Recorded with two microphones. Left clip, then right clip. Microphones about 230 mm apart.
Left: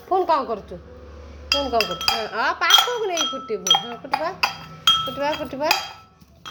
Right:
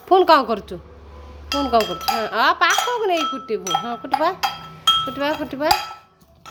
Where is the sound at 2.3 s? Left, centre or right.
Centre.